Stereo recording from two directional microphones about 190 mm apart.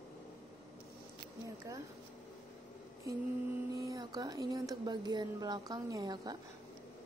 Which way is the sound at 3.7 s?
20° right (ahead or behind).